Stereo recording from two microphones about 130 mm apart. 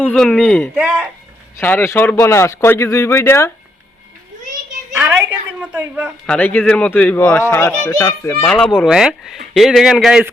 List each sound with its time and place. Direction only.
0.0 s speech: 10° left (ahead or behind)
0.8 s a woman's voice: 10° right (ahead or behind)
1.5 s a man's voice: 15° left (ahead or behind)
5.5 s a woman's voice: 15° right (ahead or behind)
6.2 s speech: 10° left (ahead or behind)
8.4 s speech: 5° left (ahead or behind)